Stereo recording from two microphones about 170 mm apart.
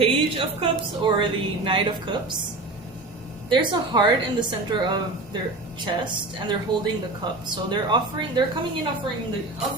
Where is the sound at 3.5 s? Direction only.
25° right (ahead or behind).